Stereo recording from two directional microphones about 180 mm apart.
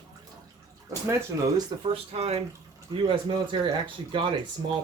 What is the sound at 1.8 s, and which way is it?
Speech, 35° right (ahead or behind).